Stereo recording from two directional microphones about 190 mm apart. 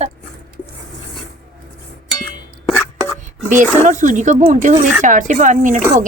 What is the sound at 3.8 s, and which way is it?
A woman's voice, 40° right (ahead or behind).